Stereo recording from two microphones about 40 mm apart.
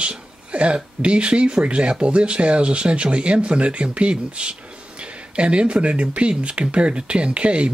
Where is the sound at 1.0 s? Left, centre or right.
Right.